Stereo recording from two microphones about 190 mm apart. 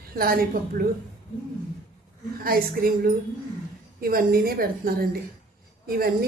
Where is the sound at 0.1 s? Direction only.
50° right (ahead or behind).